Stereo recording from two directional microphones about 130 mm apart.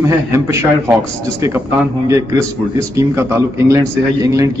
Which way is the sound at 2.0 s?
25° right (ahead or behind).